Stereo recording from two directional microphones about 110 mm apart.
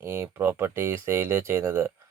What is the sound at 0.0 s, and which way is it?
Speech, 25° right (ahead or behind).